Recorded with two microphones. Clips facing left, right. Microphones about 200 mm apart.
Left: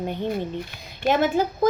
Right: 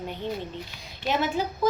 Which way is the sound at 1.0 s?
50° left (ahead or behind).